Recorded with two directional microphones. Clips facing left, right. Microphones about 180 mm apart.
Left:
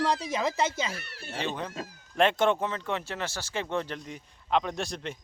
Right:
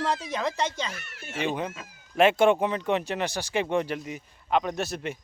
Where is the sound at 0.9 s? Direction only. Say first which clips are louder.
Left 1 dB; 35° left (ahead or behind).